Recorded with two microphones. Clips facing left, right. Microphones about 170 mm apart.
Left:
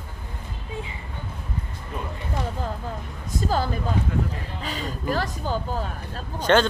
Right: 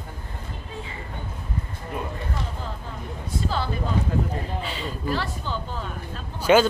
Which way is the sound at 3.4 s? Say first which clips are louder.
Left 3 dB; 45° left (ahead or behind).